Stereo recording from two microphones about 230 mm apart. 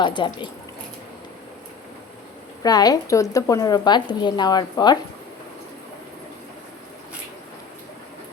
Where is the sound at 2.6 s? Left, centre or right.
Centre.